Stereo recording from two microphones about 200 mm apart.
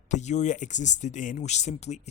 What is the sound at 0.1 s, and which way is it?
Speech, 35° left (ahead or behind).